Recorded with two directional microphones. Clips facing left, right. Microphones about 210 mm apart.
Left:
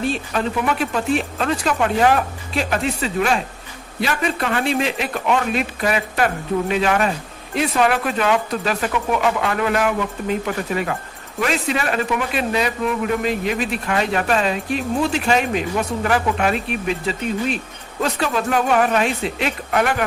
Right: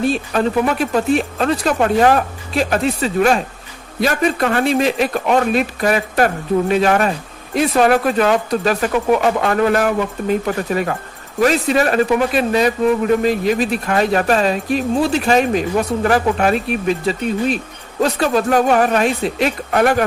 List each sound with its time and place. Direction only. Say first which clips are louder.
0.1 s a man's voice: right 5 dB; 40° right (ahead or behind)